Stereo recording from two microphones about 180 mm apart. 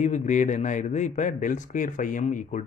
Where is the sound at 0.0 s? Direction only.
40° left (ahead or behind).